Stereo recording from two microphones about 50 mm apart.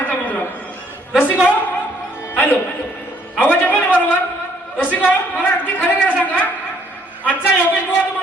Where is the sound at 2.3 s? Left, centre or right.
Left.